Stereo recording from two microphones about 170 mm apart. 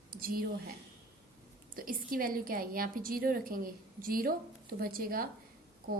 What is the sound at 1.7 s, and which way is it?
A woman's voice, 55° right (ahead or behind).